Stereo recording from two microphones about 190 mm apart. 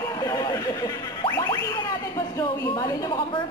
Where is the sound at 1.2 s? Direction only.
20° left (ahead or behind).